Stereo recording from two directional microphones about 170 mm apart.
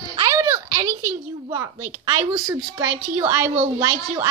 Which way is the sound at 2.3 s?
25° right (ahead or behind).